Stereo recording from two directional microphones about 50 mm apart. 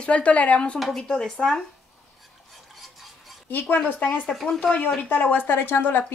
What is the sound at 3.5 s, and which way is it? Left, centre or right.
Speech, left.